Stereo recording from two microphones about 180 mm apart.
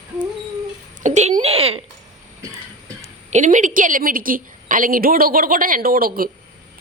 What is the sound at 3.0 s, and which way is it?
A woman's voice, 40° right (ahead or behind).